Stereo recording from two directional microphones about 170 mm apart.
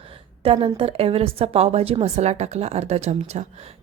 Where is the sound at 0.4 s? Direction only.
35° right (ahead or behind).